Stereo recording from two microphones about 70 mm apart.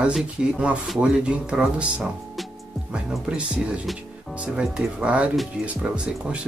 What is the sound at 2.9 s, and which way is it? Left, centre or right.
Speech, centre.